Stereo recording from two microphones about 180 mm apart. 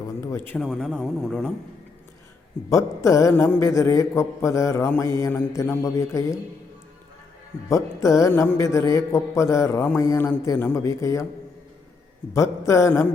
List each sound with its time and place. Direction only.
0.2 s a sound: 15° left (ahead or behind)
0.6 s a man's voice: centre (ahead or behind)
2.6 s a man's voice: 15° left (ahead or behind)
7.7 s a man's voice: 15° left (ahead or behind)
12.3 s a man's voice: 15° left (ahead or behind)